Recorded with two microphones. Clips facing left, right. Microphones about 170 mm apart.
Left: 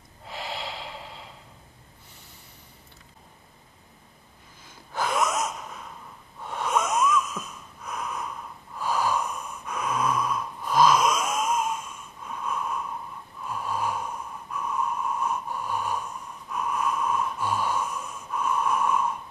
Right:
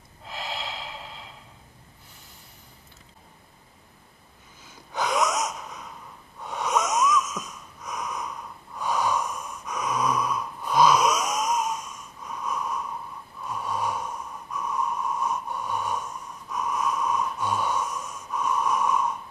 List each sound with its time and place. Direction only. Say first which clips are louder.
4.9 s wheeze: right 1 dB; 20° right (ahead or behind)
5.2 s gasp: right 1 dB; centre (ahead or behind)
6.4 s wheeze: even; centre (ahead or behind)
13.4 s gasp: even; centre (ahead or behind)